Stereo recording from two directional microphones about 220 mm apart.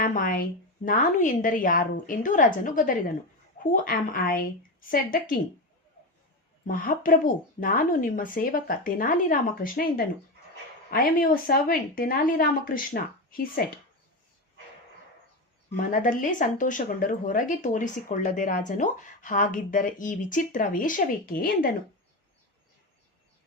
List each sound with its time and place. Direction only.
0.0 s speech: 40° left (ahead or behind)
6.7 s speech: 40° left (ahead or behind)
10.9 s speech: 40° left (ahead or behind)
15.7 s speech: 40° left (ahead or behind)